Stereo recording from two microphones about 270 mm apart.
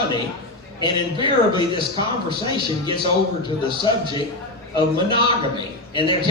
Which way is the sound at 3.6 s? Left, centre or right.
Centre.